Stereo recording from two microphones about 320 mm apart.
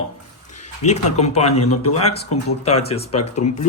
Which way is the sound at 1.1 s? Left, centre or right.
Centre.